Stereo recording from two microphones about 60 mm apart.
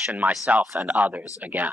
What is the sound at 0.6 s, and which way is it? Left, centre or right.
Speech, centre.